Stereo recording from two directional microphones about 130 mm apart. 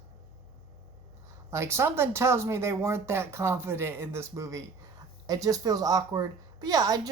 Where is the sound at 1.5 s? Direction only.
20° right (ahead or behind).